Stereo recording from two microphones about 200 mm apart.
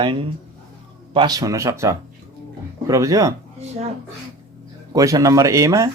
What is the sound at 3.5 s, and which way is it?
Speech, 30° right (ahead or behind).